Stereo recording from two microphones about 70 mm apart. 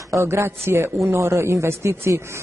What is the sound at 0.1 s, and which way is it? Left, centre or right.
Speech, right.